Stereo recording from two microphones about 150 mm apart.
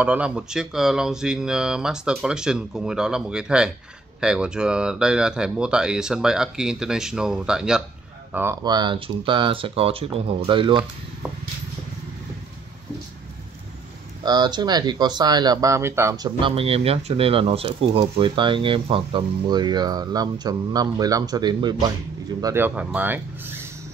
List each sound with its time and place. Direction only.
0.0 s speech: 10° right (ahead or behind)
8.6 s speech: 30° right (ahead or behind)
14.2 s speech: 30° right (ahead or behind)
22.4 s speech: 15° right (ahead or behind)
22.9 s a sound: 10° right (ahead or behind)